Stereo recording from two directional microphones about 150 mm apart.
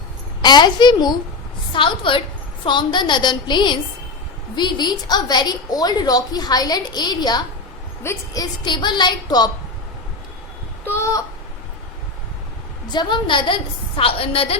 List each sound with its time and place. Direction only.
0.4 s a woman's voice: 30° left (ahead or behind)
10.8 s speech: 15° left (ahead or behind)
12.9 s a woman's voice: 30° left (ahead or behind)